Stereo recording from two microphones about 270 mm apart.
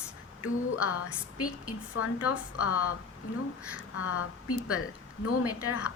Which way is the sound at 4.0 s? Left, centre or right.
Left.